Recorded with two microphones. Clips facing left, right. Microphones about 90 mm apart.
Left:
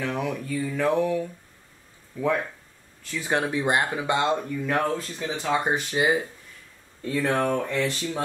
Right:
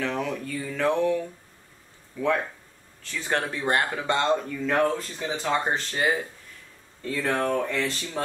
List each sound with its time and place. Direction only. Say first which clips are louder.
0.0 s speech: even; 10° left (ahead or behind)
3.1 s speech: left 2 dB; 15° left (ahead or behind)